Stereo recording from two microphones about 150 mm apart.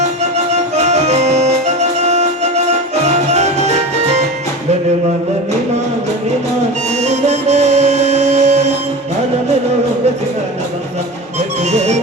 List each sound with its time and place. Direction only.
0.0 s music: 50° right (ahead or behind)
7.0 s music: 45° right (ahead or behind)